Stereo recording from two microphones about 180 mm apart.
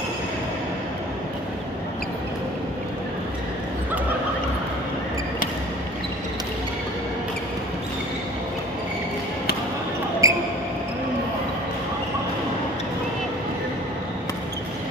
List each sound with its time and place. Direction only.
10.2 s basketball bounce: 20° right (ahead or behind)